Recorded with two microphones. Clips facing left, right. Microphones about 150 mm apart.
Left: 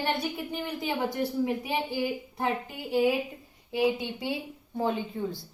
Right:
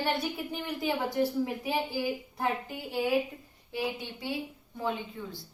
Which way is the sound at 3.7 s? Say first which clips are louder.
Left 7 dB; 15° left (ahead or behind).